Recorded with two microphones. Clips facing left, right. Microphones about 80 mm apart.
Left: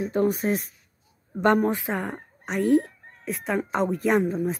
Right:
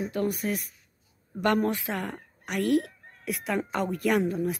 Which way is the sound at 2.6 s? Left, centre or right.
Right.